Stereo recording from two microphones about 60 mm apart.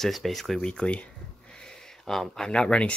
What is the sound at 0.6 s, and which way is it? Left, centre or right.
Speech, centre.